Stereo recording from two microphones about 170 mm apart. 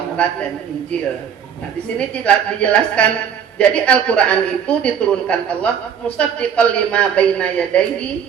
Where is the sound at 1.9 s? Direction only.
5° left (ahead or behind).